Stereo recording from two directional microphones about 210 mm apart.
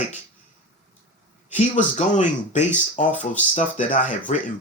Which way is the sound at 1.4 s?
35° left (ahead or behind).